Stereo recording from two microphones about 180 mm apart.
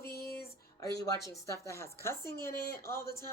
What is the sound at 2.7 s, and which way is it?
Speech, 15° left (ahead or behind).